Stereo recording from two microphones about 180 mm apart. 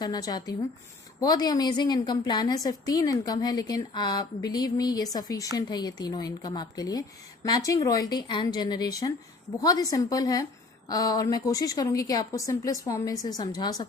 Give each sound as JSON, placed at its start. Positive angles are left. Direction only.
{"t": 0.0, "sound": "a woman's voice", "side_deg": 20}